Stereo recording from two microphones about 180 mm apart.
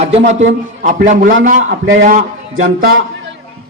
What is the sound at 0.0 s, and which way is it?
A man's voice, 40° right (ahead or behind).